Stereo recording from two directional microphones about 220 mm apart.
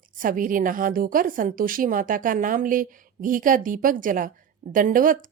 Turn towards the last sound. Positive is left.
turn(degrees=-40)  # may be behind; listen again after turning